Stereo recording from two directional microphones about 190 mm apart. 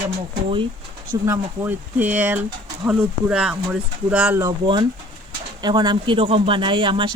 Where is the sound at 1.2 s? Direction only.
10° right (ahead or behind).